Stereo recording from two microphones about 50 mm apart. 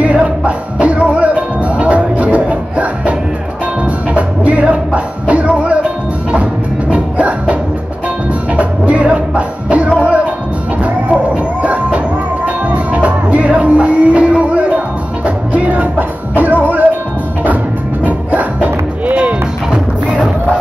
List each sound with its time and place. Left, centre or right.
0.0 s music: right
8.5 s music: right
11.6 s music: right
18.0 s music: right
19.1 s music: right